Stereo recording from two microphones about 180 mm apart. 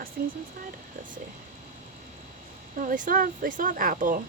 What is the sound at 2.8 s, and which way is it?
Speech, 45° right (ahead or behind).